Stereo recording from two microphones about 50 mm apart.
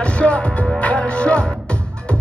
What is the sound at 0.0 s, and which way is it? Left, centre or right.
Music, left.